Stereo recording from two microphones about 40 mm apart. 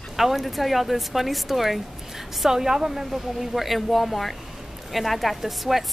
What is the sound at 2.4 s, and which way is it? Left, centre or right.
A woman's voice, centre.